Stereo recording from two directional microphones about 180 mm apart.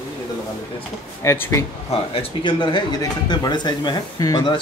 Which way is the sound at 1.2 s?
15° left (ahead or behind).